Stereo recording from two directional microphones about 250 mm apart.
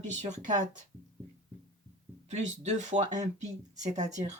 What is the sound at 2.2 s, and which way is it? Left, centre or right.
Speech, right.